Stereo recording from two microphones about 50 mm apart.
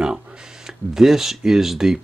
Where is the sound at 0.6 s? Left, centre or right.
Centre.